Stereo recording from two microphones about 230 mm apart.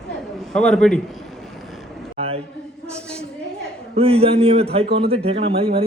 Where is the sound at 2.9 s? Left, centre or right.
Centre.